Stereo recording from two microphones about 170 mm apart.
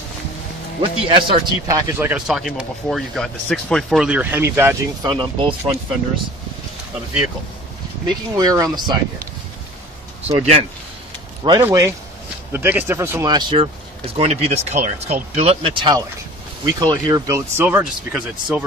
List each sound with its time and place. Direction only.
0.7 s speech: 30° right (ahead or behind)
1.7 s speech: 10° right (ahead or behind)
5.0 s speech: 25° right (ahead or behind)
8.4 s speech: 20° right (ahead or behind)
10.2 s speech: 40° right (ahead or behind)
11.4 s speech: 25° right (ahead or behind)
14.1 s speech: 35° right (ahead or behind); by 18.6 s 5° right (ahead or behind)